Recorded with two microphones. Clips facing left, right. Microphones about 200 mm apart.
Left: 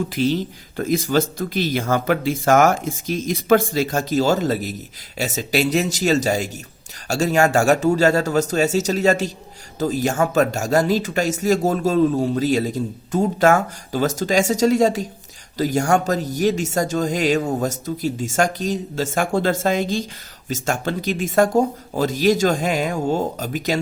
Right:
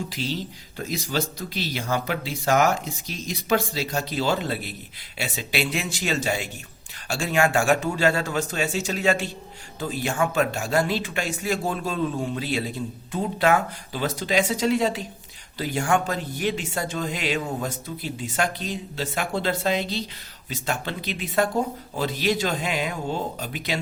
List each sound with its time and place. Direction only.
0.1 s speech: 50° left (ahead or behind)